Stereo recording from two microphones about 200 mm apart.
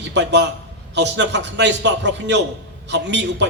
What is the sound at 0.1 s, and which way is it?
A man's voice, 60° right (ahead or behind).